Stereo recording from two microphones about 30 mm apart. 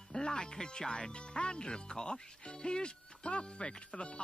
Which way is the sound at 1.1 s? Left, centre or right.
Left.